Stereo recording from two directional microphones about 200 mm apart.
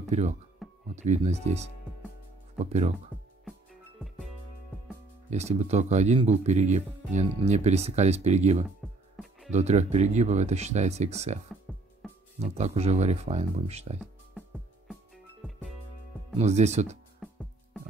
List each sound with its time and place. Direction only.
0.0 s speech: 35° right (ahead or behind)
5.3 s speech: 35° right (ahead or behind)
9.2 s music: centre (ahead or behind)
9.5 s speech: 35° right (ahead or behind)
11.7 s music: centre (ahead or behind)
12.4 s speech: 35° right (ahead or behind)
16.3 s speech: 35° right (ahead or behind)